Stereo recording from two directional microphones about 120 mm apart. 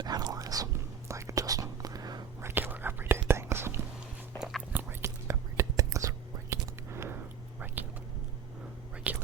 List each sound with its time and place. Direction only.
0.0 s whispering: 35° right (ahead or behind)
2.4 s whispering: 20° right (ahead or behind)
4.4 s whispering: 5° right (ahead or behind)
4.7 s whispering: 15° right (ahead or behind)
9.1 s whispering: 15° right (ahead or behind)